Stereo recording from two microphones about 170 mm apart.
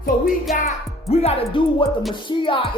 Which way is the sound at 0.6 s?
40° left (ahead or behind).